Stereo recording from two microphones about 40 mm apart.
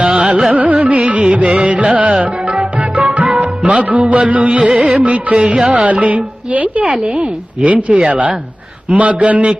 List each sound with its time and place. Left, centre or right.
0.0 s carnatic music: right
0.6 s carnatic music: right
0.9 s music: right
4.0 s a woman's voice: right